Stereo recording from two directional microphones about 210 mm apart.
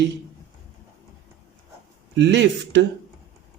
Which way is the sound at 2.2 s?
55° right (ahead or behind).